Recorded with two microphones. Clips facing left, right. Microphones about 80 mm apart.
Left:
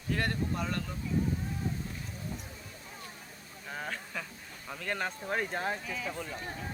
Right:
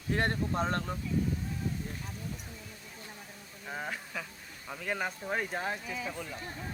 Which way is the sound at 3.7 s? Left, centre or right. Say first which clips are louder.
Right 1 dB; centre.